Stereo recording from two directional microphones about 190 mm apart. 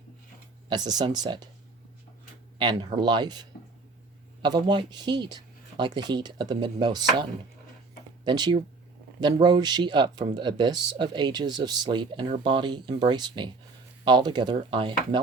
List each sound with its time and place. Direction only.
0.7 s speech: 20° right (ahead or behind)
2.6 s speech: 25° right (ahead or behind)
4.4 s speech: 25° right (ahead or behind)
8.2 s speech: 25° right (ahead or behind)